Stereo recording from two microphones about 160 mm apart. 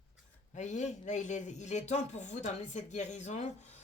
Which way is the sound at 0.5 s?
50° left (ahead or behind).